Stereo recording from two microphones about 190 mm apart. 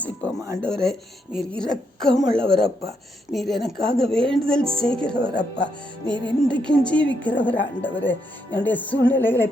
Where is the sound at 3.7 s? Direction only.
60° left (ahead or behind).